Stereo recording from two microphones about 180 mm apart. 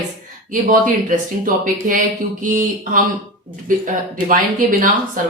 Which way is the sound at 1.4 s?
45° right (ahead or behind).